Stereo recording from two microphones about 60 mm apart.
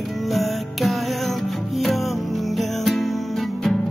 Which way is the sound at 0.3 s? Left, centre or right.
Centre.